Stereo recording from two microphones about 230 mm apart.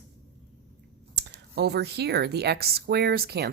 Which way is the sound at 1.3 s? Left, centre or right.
Right.